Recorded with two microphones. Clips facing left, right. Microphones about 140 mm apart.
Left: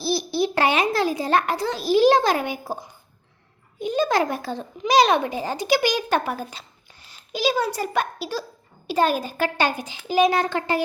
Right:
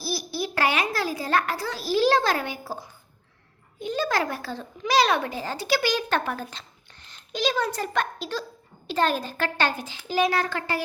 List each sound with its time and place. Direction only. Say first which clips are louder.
0.0 s a child's voice: left 7 dB; 25° left (ahead or behind)